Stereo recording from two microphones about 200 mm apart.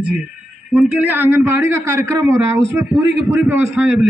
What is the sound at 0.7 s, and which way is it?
A man's voice, 5° right (ahead or behind).